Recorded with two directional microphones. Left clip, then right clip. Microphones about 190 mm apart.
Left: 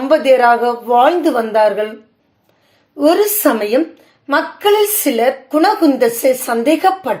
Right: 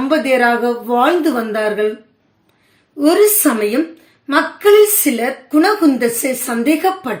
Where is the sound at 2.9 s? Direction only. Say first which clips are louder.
Left 2 dB; 25° left (ahead or behind).